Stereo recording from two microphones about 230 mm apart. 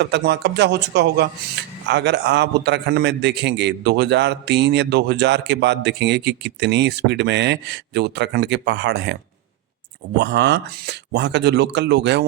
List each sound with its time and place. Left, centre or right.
0.0 s a man's voice: right
10.2 s a man's voice: right